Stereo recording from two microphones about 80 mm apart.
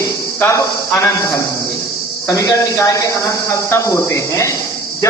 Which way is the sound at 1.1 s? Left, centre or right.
Left.